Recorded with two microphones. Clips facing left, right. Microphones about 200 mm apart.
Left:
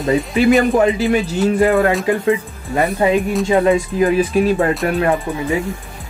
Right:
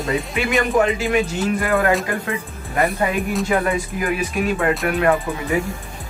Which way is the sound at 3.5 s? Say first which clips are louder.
Left 6 dB; 25° left (ahead or behind).